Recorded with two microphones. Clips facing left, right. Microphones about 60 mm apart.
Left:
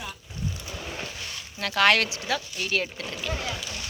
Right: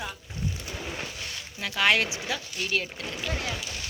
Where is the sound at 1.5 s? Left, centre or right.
Centre.